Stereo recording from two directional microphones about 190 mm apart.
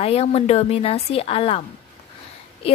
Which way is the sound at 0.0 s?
30° left (ahead or behind).